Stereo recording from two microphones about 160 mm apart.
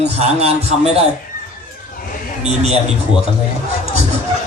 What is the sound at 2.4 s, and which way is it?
Speech, 40° right (ahead or behind).